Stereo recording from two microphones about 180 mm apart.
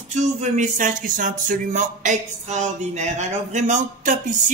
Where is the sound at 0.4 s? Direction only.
45° right (ahead or behind).